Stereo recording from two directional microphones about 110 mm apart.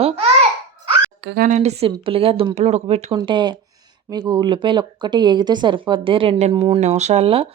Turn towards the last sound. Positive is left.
turn(degrees=-60)  # may be behind; listen again after turning